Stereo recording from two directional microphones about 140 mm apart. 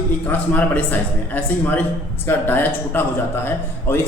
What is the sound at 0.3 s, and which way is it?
A man's voice, 10° left (ahead or behind).